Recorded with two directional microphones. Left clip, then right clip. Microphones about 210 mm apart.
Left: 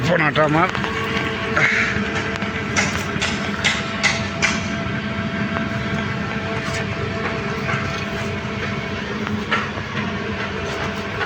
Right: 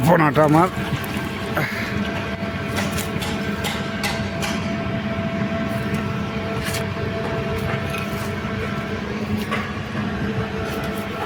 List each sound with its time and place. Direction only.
0.1 s speech: 35° right (ahead or behind)
0.4 s speech: 25° right (ahead or behind)